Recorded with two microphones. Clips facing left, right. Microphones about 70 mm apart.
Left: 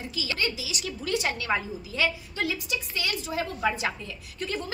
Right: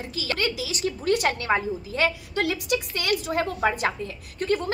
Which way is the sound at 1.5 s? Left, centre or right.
Right.